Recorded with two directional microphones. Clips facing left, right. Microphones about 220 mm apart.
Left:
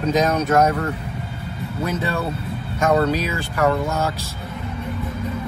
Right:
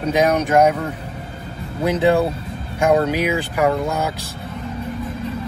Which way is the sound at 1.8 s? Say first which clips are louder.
Right 8 dB; 15° right (ahead or behind).